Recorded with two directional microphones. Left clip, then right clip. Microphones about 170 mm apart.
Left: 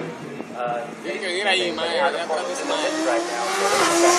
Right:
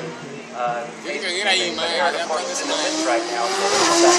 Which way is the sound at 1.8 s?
35° left (ahead or behind).